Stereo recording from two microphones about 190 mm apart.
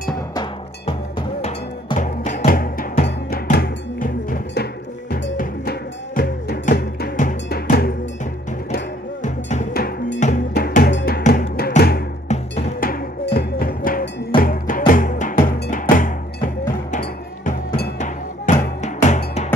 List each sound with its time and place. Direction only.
0.3 s music: 25° left (ahead or behind)
2.0 s music: 40° left (ahead or behind)
9.2 s music: 40° left (ahead or behind)
9.8 s music: 55° left (ahead or behind)
12.3 s music: 35° left (ahead or behind)
12.8 s music: 55° left (ahead or behind)
17.9 s music: 40° left (ahead or behind)